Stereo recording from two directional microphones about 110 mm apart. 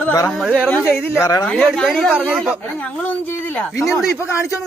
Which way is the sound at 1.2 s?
35° left (ahead or behind).